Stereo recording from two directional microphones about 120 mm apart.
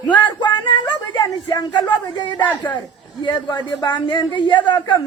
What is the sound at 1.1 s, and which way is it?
Speech, 35° left (ahead or behind).